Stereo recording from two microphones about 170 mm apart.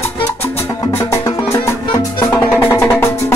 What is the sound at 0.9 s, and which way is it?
Music, 15° left (ahead or behind).